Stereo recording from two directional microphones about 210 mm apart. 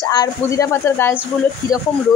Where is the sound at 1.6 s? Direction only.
20° right (ahead or behind).